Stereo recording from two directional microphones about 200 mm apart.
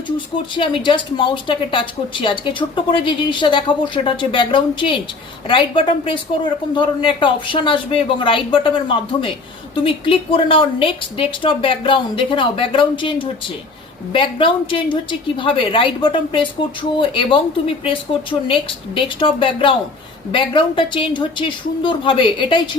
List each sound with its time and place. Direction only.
0.5 s a woman's voice: 25° left (ahead or behind)